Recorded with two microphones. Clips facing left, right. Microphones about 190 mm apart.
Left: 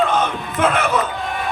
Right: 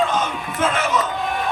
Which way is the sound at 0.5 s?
60° left (ahead or behind).